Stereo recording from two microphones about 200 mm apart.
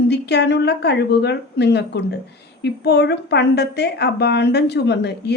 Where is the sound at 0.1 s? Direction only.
55° left (ahead or behind).